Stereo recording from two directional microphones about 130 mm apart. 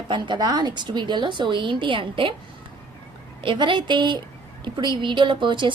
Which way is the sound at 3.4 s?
40° right (ahead or behind).